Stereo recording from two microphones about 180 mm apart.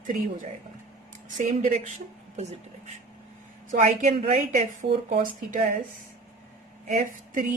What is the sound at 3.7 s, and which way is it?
A woman's voice, 45° right (ahead or behind).